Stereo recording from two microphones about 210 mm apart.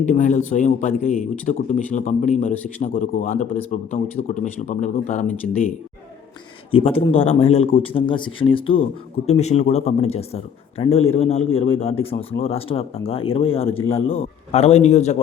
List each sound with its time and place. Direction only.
0.0 s a man's voice: 35° left (ahead or behind)
6.7 s speech: 25° left (ahead or behind)
13.7 s a man's voice: 10° left (ahead or behind)
14.1 s a man's voice: 30° left (ahead or behind)